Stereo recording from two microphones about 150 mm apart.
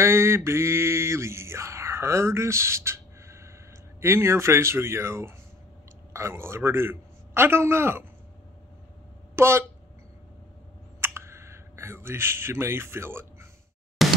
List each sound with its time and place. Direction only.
0.0 s a sound: 15° right (ahead or behind)
4.0 s a man's voice: 15° right (ahead or behind)
9.3 s speech: 15° right (ahead or behind)
11.0 s clicking: 15° right (ahead or behind)
14.0 s music: centre (ahead or behind)